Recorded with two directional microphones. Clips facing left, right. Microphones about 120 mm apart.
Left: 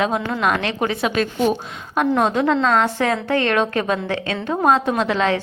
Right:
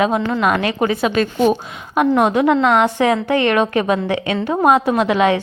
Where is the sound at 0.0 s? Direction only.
Centre (ahead or behind).